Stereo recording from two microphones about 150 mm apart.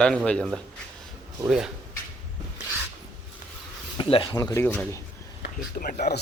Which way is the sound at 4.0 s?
35° left (ahead or behind).